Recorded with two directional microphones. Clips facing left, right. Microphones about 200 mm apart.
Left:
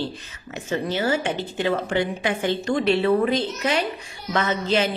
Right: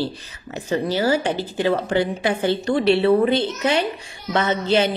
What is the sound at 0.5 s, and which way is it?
A woman's voice, 35° right (ahead or behind).